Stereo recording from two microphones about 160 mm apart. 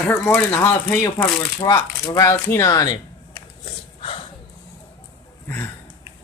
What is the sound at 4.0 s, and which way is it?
Dog, 35° left (ahead or behind).